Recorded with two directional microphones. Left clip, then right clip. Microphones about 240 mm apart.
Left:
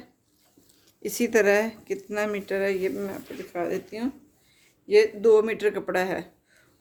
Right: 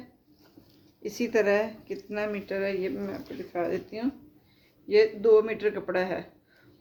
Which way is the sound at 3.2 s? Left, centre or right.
Left.